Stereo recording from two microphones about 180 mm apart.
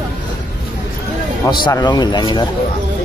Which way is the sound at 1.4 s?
20° left (ahead or behind).